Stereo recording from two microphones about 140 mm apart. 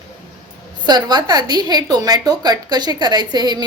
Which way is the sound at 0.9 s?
30° right (ahead or behind).